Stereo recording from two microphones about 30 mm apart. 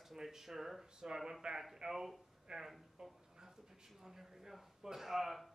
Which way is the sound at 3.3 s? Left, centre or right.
Centre.